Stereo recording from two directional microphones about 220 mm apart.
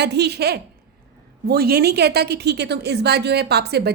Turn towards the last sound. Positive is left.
turn(degrees=-45)  # may be behind; listen again after turning